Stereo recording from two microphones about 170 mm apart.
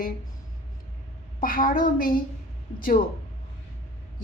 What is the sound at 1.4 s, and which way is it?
Speech, 55° left (ahead or behind).